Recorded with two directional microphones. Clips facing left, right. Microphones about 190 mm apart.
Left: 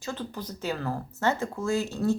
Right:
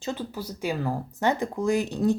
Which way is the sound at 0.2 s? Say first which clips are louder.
Right 3 dB; 10° right (ahead or behind).